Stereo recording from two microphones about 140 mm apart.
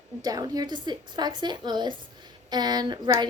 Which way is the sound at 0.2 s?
25° right (ahead or behind).